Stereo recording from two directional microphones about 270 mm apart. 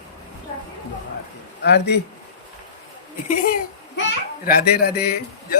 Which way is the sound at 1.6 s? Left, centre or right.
Left.